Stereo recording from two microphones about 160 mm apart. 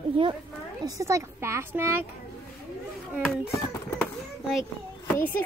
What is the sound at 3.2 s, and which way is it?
Speech, 5° left (ahead or behind).